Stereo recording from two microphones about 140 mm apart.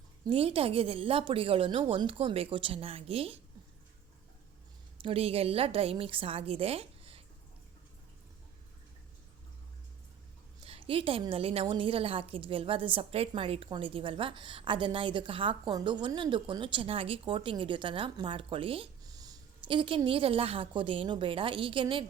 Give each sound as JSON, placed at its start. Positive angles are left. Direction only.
{"t": 0.3, "sound": "a woman's voice", "side_deg": -40}
{"t": 5.0, "sound": "a woman's voice", "side_deg": -45}
{"t": 10.7, "sound": "a sound", "side_deg": -40}
{"t": 11.2, "sound": "a woman's voice", "side_deg": -40}
{"t": 19.0, "sound": "a sound", "side_deg": -25}
{"t": 20.1, "sound": "a woman's voice", "side_deg": -40}